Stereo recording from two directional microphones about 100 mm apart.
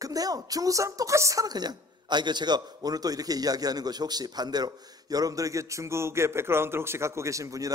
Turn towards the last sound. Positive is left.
turn(degrees=-35)  # may be behind; listen again after turning